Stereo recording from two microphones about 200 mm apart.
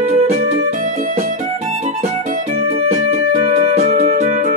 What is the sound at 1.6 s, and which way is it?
Music, 35° right (ahead or behind).